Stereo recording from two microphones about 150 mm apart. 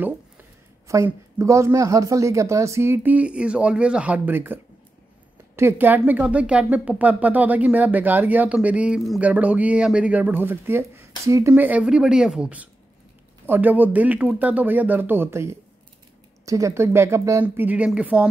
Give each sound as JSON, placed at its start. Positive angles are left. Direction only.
{"t": 0.8, "sound": "speech", "side_deg": -20}
{"t": 5.6, "sound": "speech", "side_deg": -15}